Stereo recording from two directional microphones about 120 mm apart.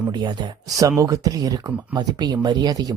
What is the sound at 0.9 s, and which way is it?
Speech, 25° right (ahead or behind).